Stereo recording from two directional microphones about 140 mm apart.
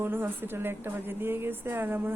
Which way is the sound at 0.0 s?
15° right (ahead or behind).